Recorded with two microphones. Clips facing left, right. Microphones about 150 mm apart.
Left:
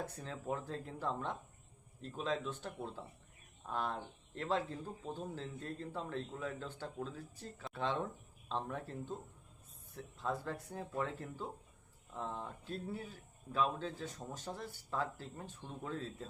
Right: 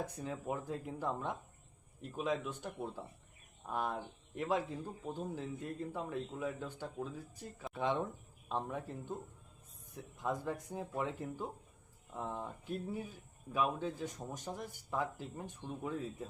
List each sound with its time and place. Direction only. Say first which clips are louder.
0.0 s speech: right 3 dB; 15° right (ahead or behind)